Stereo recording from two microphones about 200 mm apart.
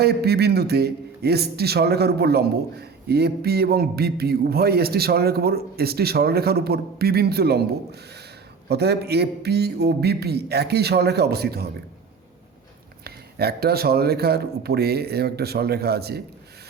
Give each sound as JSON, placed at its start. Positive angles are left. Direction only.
{"t": 0.0, "sound": "a man's voice", "side_deg": -55}
{"t": 8.7, "sound": "a man's voice", "side_deg": -55}
{"t": 13.1, "sound": "a man's voice", "side_deg": -50}